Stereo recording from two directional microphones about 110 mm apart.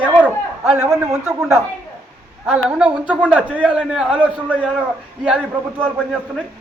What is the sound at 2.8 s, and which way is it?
A man's voice, 10° right (ahead or behind).